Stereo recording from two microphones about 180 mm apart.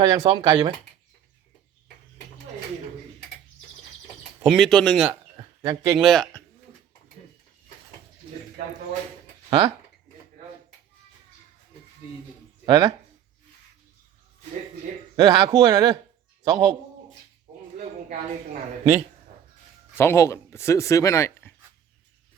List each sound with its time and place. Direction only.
0.0 s speech: 20° right (ahead or behind)
4.4 s speech: centre (ahead or behind)
5.4 s a sound: 20° right (ahead or behind)
6.0 s speech: centre (ahead or behind)
9.5 s speech: 25° right (ahead or behind)
12.6 s speech: 20° right (ahead or behind)
15.1 s a man's voice: 25° right (ahead or behind)
20.0 s speech: 15° left (ahead or behind)